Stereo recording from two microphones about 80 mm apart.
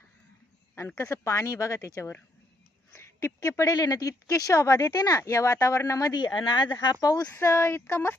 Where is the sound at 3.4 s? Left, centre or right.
Left.